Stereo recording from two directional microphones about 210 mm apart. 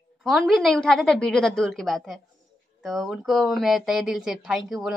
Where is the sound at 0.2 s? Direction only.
Centre (ahead or behind).